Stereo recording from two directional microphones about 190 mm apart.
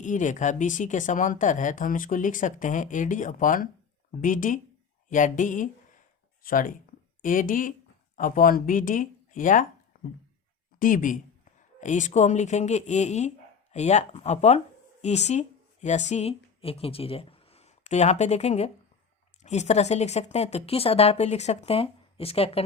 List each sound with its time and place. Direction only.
0.0 s a woman's voice: 40° left (ahead or behind)